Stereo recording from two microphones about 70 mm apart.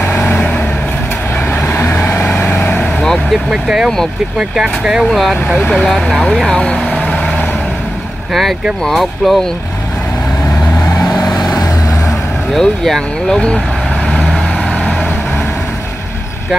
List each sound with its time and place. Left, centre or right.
0.0 s vehicle: left
3.0 s vehicle: centre
3.4 s speech: centre
6.3 s vehicle: centre
8.3 s speech: centre
11.4 s vehicle: left
12.5 s speech: centre